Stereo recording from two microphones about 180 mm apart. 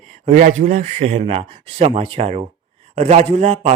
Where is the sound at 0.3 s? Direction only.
50° right (ahead or behind).